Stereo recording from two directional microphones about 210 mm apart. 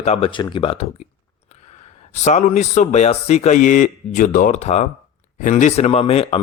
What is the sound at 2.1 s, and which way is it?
Speech, 35° left (ahead or behind).